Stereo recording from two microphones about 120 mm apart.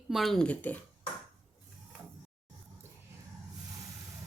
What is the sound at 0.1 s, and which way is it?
Speech, centre (ahead or behind).